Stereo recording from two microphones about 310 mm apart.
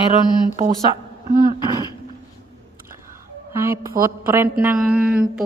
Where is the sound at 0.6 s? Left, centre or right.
Right.